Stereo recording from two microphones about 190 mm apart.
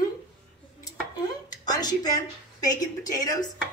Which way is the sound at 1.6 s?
20° left (ahead or behind).